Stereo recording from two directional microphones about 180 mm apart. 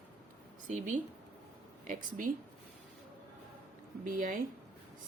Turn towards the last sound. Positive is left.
turn(degrees=-45)  # may be behind; listen again after turning